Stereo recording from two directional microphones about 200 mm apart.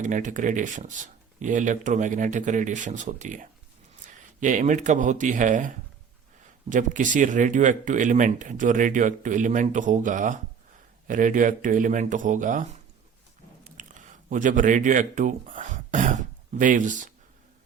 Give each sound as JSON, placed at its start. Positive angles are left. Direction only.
{"t": 0.0, "sound": "speech", "side_deg": -40}
{"t": 4.0, "sound": "a sound", "side_deg": -40}
{"t": 4.4, "sound": "speech", "side_deg": -40}
{"t": 13.7, "sound": "speech", "side_deg": -40}